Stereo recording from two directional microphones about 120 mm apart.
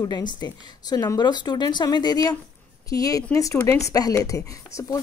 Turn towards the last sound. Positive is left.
turn(degrees=25)  # may be behind; listen again after turning